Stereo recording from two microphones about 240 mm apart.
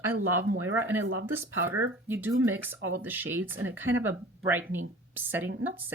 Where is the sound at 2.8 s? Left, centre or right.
Right.